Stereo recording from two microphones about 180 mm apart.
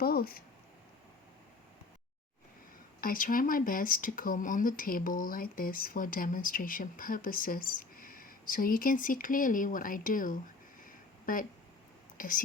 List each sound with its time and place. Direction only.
0.0 s speech: 55° left (ahead or behind)
3.0 s speech: 50° left (ahead or behind)
12.1 s whispering: 50° left (ahead or behind)